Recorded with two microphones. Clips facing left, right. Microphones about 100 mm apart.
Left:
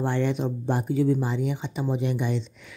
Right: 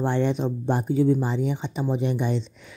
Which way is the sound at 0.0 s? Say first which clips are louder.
Right 2 dB; 25° right (ahead or behind).